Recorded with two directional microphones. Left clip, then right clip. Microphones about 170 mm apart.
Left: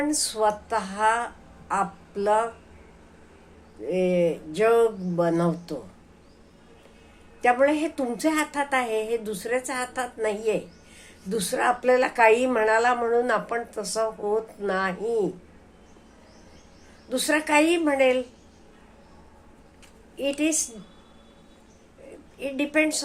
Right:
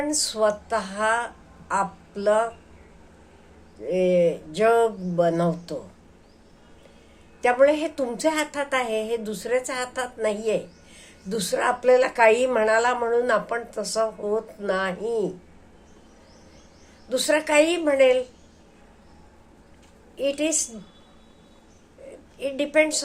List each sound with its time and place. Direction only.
0.1 s a woman's voice: 10° right (ahead or behind)
3.8 s a woman's voice: 10° right (ahead or behind)
7.4 s a woman's voice: 10° right (ahead or behind)
17.1 s a woman's voice: 10° right (ahead or behind)
20.1 s a woman's voice: 10° right (ahead or behind)
22.4 s a woman's voice: 10° right (ahead or behind)